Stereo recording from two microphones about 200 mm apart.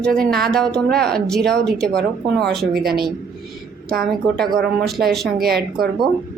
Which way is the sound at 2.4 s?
50° right (ahead or behind).